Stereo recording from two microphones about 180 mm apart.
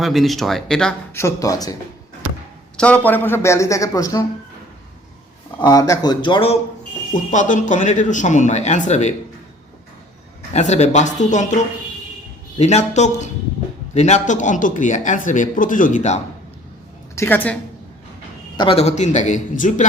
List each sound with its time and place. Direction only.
0.0 s speech: centre (ahead or behind)
1.1 s speech: 15° left (ahead or behind)
2.7 s a man's voice: 5° left (ahead or behind)
5.6 s speech: 20° left (ahead or behind)
7.1 s speech: 45° left (ahead or behind)
10.5 s speech: 40° left (ahead or behind)
17.2 s a man's voice: 10° left (ahead or behind)
18.5 s speech: 30° left (ahead or behind); by 19.8 s 45° left (ahead or behind)